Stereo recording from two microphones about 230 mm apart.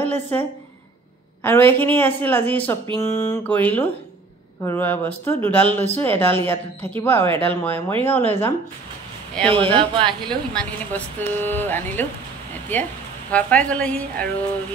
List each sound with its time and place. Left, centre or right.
0.0 s a woman's voice: centre
9.7 s speech: right
10.5 s speech: centre